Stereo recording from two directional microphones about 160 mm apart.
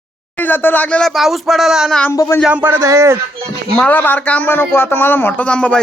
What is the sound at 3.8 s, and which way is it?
Speech, 10° left (ahead or behind).